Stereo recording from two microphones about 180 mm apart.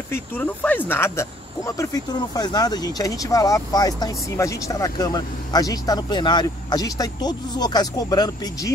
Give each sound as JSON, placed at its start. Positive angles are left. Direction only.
{"t": 0.1, "sound": "speech", "side_deg": 10}